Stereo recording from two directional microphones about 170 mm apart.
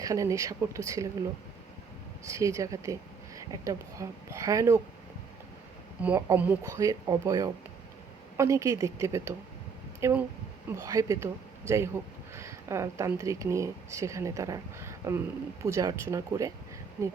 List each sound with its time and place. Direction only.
0.0 s speech: 20° right (ahead or behind)
2.2 s speech: 20° right (ahead or behind)
6.0 s speech: 10° right (ahead or behind)